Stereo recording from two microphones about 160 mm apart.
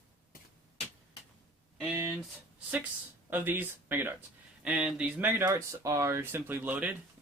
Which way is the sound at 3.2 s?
10° right (ahead or behind).